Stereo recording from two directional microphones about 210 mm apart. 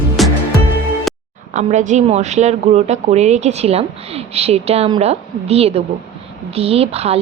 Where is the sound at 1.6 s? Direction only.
35° right (ahead or behind).